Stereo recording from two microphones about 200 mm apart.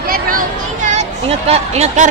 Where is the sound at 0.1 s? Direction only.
45° right (ahead or behind).